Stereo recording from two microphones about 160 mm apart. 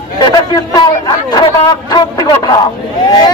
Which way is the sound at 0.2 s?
25° left (ahead or behind).